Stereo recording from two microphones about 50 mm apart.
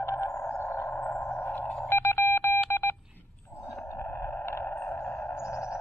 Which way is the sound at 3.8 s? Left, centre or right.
Left.